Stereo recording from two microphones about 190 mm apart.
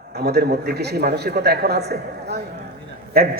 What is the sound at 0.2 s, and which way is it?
A man's voice, 60° right (ahead or behind).